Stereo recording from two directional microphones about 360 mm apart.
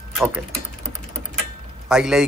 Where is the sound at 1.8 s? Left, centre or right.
Centre.